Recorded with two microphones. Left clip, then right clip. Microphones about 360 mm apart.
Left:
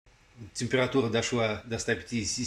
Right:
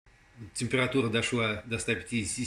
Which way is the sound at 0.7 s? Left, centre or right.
Centre.